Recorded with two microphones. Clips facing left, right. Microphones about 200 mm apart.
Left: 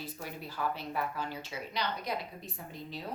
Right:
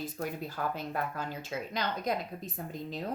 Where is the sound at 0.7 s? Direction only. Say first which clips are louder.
Right 1 dB; 45° right (ahead or behind).